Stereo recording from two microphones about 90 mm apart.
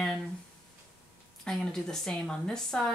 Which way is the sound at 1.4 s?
5° left (ahead or behind).